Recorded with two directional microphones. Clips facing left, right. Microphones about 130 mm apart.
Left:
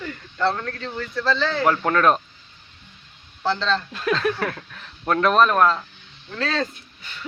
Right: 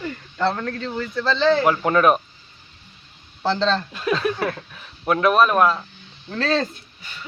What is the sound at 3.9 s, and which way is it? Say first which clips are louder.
Speech: even; 10° right (ahead or behind).